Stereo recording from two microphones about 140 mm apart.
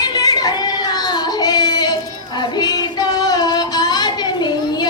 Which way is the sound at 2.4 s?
30° left (ahead or behind).